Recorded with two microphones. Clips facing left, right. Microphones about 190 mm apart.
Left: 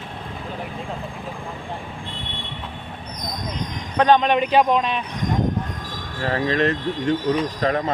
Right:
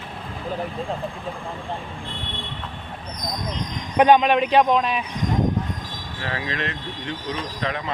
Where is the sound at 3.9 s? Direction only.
15° right (ahead or behind).